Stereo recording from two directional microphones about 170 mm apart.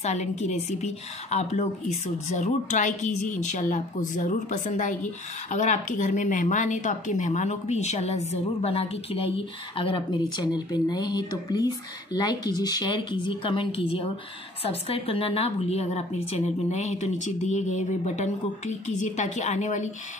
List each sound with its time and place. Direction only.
0.0 s a woman's voice: 40° left (ahead or behind)